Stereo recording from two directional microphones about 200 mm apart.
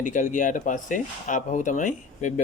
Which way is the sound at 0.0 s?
40° left (ahead or behind).